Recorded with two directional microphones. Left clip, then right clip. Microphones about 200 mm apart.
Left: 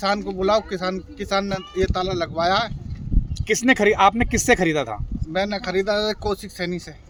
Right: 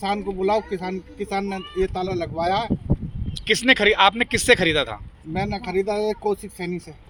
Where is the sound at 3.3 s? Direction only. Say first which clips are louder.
Right 1 dB; 60° left (ahead or behind).